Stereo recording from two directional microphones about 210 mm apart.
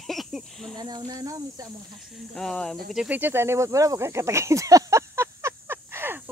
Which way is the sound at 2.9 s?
5° right (ahead or behind).